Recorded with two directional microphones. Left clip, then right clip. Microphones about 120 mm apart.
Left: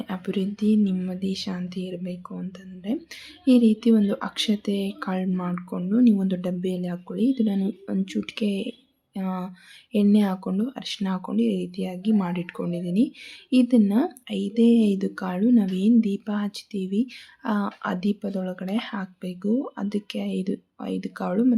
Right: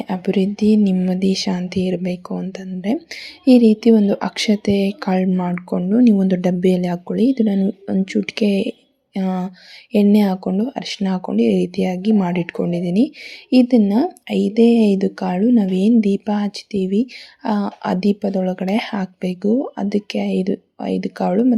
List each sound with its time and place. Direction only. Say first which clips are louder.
0.0 s speech: right 9 dB; 40° right (ahead or behind)